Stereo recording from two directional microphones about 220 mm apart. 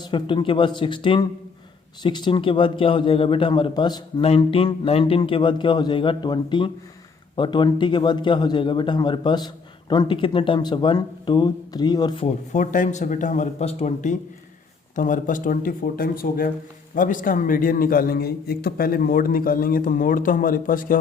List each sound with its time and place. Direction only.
0.0 s a man's voice: 20° left (ahead or behind)
12.5 s a man's voice: 35° left (ahead or behind)